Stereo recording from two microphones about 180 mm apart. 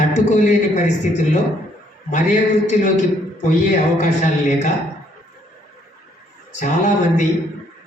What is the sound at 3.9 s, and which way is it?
Speech, 40° left (ahead or behind).